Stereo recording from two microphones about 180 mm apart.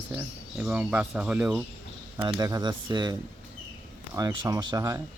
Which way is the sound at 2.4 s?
20° right (ahead or behind).